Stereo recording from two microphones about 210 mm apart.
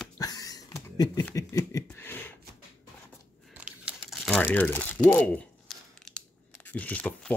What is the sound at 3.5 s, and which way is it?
Crumpling, 5° right (ahead or behind).